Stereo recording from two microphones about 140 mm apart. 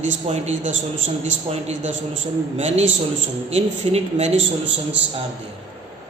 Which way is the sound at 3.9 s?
50° right (ahead or behind).